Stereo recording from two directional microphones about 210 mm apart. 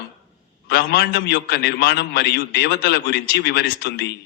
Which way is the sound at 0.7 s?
50° left (ahead or behind).